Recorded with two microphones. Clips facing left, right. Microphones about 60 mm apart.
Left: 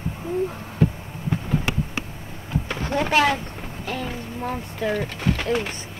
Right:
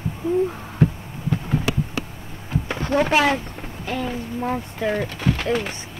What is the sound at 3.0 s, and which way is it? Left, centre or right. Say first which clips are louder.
Speech: right 1 dB; centre.